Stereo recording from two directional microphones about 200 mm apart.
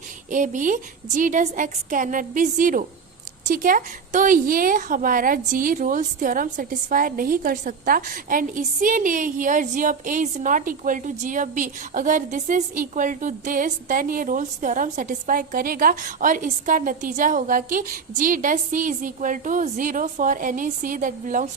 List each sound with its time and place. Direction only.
0.3 s a woman's voice: 40° right (ahead or behind)